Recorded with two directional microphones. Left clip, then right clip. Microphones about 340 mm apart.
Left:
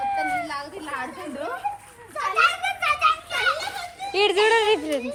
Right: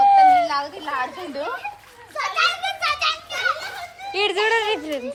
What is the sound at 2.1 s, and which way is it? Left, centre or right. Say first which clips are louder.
Children playing: even; right.